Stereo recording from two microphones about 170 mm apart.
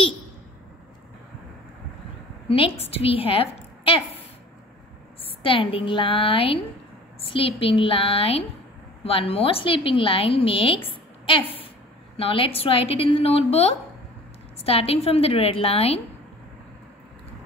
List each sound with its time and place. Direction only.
2.4 s a woman's voice: 35° left (ahead or behind)
5.4 s a woman's voice: 30° left (ahead or behind)